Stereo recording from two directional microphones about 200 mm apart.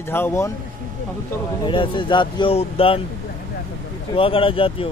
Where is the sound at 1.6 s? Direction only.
25° left (ahead or behind).